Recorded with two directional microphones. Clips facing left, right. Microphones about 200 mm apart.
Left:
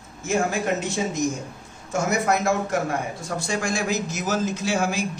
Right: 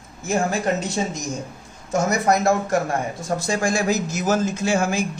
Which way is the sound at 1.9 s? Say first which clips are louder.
Right 3 dB; 40° right (ahead or behind).